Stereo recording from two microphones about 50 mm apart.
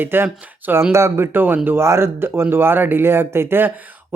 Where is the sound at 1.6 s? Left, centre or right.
Right.